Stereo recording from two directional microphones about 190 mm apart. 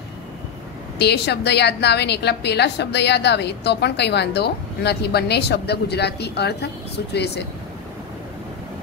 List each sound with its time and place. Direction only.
0.9 s a woman's voice: 60° left (ahead or behind)